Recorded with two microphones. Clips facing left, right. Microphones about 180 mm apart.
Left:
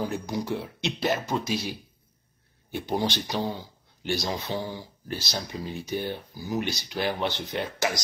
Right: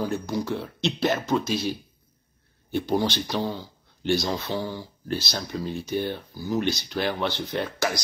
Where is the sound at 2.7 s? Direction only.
15° left (ahead or behind).